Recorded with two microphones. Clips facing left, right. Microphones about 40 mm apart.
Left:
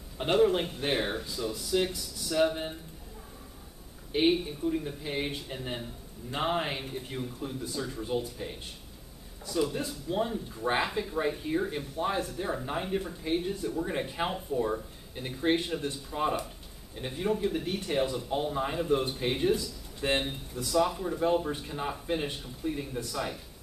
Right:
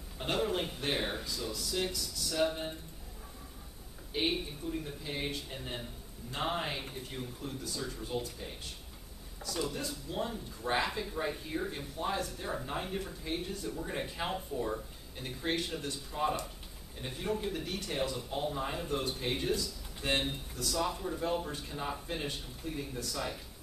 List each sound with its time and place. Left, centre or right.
0.4 s speech: centre
1.5 s speech: left
4.1 s speech: centre
17.6 s speech: left